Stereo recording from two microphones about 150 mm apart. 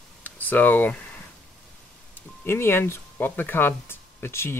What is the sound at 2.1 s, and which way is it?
Speech, 15° left (ahead or behind).